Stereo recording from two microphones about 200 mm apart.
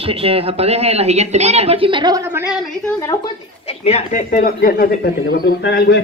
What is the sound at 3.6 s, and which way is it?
A man's voice, 30° left (ahead or behind).